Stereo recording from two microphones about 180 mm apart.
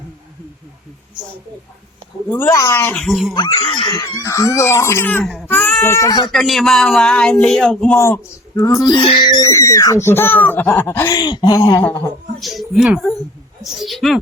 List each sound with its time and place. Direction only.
2.3 s speech: 15° left (ahead or behind)
3.3 s speech: 25° left (ahead or behind)
6.2 s speech: centre (ahead or behind)
7.9 s speech: 15° left (ahead or behind)
11.9 s speech: 5° left (ahead or behind)